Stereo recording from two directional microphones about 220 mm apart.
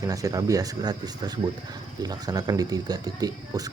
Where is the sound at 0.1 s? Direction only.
15° right (ahead or behind).